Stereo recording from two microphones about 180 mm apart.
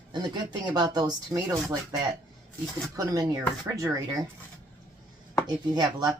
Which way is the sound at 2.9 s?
20° right (ahead or behind).